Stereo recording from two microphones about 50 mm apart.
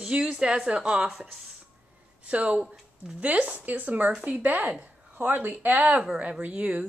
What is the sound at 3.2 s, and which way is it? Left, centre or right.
Speech, right.